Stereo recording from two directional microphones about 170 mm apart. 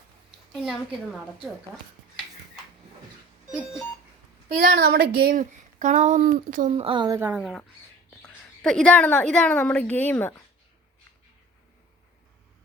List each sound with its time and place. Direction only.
0.5 s a woman's voice: 5° right (ahead or behind)
4.6 s speech: 65° right (ahead or behind)
6.7 s speech: 35° right (ahead or behind)
7.2 s speech: 10° right (ahead or behind)
8.2 s a woman's voice: 5° left (ahead or behind)